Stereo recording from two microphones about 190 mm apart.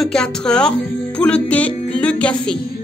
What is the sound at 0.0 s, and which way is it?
A woman's voice, 5° left (ahead or behind).